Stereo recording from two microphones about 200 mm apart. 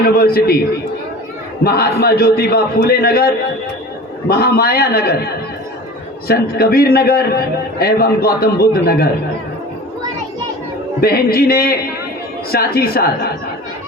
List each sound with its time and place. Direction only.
0.2 s a man's voice: 50° left (ahead or behind)
1.6 s a man's voice: 50° left (ahead or behind)
11.0 s a man's voice: 50° left (ahead or behind)